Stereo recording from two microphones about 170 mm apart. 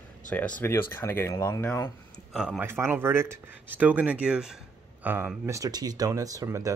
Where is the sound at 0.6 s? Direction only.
15° left (ahead or behind).